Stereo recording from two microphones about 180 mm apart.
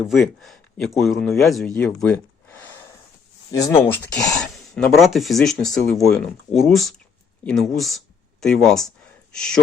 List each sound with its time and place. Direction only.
0.0 s speech: centre (ahead or behind)
1.7 s a sound: 5° left (ahead or behind)
3.5 s speech: 20° left (ahead or behind); by 9.6 s 5° left (ahead or behind)